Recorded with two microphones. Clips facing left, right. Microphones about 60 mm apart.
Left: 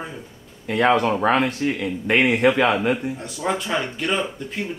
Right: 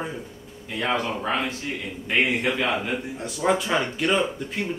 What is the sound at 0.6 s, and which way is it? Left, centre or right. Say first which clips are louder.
Speech: left 8 dB; left.